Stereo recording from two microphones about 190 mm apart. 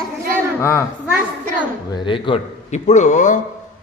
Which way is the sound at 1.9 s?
25° left (ahead or behind).